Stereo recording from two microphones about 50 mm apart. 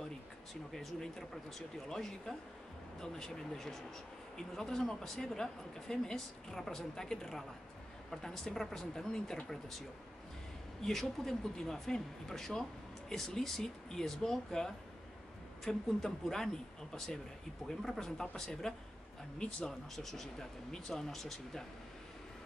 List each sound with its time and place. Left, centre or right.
0.7 s speech: centre
10.8 s speech: centre
20.0 s speech: centre